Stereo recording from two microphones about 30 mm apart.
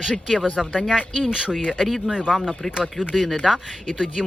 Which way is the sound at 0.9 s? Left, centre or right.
Right.